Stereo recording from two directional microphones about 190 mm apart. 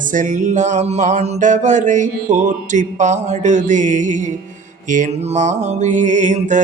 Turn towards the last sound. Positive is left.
turn(degrees=-40)  # may be behind; listen again after turning